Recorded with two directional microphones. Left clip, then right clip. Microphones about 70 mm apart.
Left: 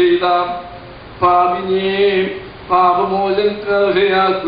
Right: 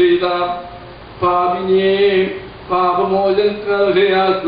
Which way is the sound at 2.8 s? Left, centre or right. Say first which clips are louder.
Left 2 dB; centre.